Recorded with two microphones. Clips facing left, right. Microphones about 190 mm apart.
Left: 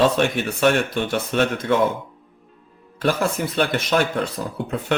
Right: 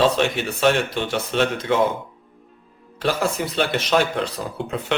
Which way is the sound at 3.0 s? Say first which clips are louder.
Left 1 dB; 50° left (ahead or behind).